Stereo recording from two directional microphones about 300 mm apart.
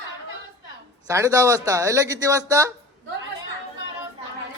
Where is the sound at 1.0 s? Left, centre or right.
Centre.